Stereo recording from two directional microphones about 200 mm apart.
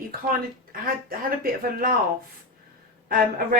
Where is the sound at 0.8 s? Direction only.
45° right (ahead or behind).